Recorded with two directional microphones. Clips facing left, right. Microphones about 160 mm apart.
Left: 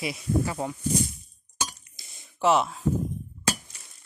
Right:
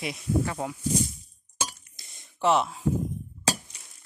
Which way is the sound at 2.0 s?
5° left (ahead or behind).